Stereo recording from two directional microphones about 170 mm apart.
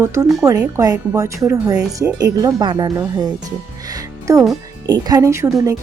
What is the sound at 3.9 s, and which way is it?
Music, 20° right (ahead or behind).